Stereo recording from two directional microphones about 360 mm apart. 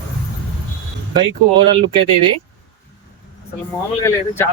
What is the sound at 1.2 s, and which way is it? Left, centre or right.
Speech, centre.